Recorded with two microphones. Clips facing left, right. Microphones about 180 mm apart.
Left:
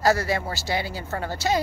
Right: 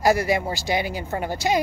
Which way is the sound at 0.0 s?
15° right (ahead or behind).